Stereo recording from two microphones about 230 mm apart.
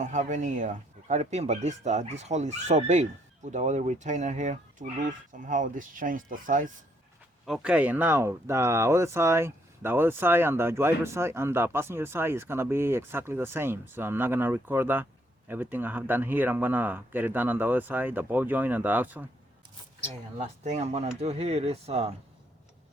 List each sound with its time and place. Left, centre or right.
0.0 s speech: right
7.4 s speech: centre
20.4 s speech: right